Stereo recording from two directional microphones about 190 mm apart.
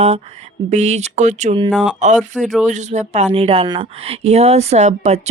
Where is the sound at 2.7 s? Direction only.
35° right (ahead or behind).